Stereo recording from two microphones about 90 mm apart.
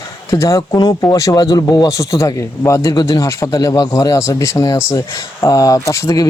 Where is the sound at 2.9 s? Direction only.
45° left (ahead or behind).